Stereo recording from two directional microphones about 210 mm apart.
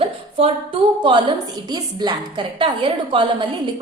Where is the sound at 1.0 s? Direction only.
20° right (ahead or behind).